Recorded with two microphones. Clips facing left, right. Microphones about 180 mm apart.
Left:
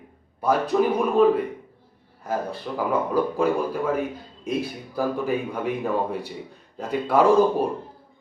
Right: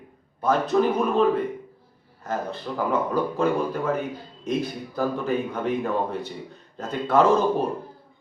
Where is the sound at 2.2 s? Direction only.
10° left (ahead or behind).